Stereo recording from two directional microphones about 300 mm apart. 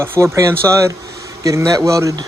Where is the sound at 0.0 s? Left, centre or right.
Centre.